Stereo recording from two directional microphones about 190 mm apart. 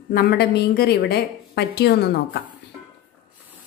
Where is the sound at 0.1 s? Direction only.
55° left (ahead or behind).